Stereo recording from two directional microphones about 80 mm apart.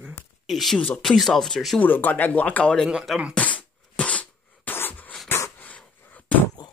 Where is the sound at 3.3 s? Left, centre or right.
Centre.